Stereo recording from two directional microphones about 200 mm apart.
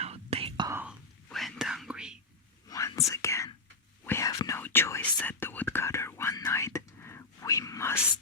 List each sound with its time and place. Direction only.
0.0 s whispering: 30° right (ahead or behind)
0.8 s whispering: centre (ahead or behind)
2.6 s whispering: 15° left (ahead or behind)